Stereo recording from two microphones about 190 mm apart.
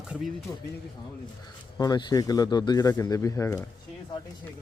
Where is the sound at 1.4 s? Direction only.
20° left (ahead or behind).